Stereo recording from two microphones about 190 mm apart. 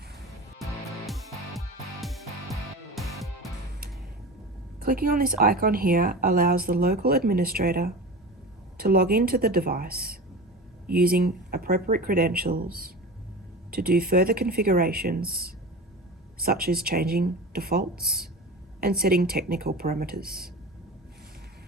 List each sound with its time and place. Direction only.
0.6 s music: centre (ahead or behind)
4.8 s a woman's voice: 50° right (ahead or behind)
16.4 s a woman's voice: 50° right (ahead or behind)